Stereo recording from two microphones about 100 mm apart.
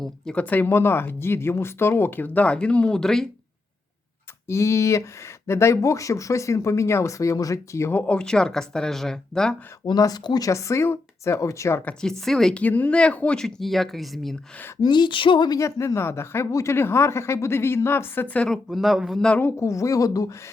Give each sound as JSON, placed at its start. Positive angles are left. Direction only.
{"t": 0.0, "sound": "speech", "side_deg": 10}
{"t": 4.4, "sound": "speech", "side_deg": 30}
{"t": 8.0, "sound": "speech", "side_deg": 10}
{"t": 9.8, "sound": "speech", "side_deg": 40}
{"t": 11.9, "sound": "speech", "side_deg": 10}
{"t": 12.6, "sound": "speech", "side_deg": 15}
{"t": 14.8, "sound": "speech", "side_deg": 50}
{"t": 15.5, "sound": "speech", "side_deg": 30}
{"t": 18.4, "sound": "speech", "side_deg": 0}
{"t": 19.4, "sound": "speech", "side_deg": 25}